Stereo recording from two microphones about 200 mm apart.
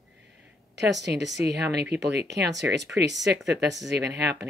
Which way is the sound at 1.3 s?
60° right (ahead or behind).